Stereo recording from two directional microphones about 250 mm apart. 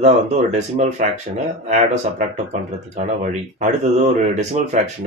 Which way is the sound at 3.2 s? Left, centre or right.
Right.